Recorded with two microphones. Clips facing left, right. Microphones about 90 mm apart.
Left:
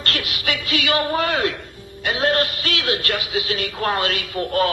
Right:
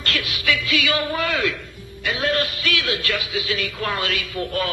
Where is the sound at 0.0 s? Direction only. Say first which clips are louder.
Even; 40° left (ahead or behind).